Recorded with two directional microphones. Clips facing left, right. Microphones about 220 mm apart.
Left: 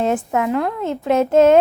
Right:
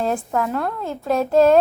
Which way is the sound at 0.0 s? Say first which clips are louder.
Left 3 dB; 20° left (ahead or behind).